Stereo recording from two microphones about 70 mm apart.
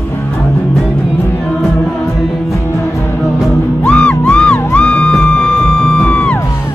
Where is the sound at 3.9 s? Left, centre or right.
Centre.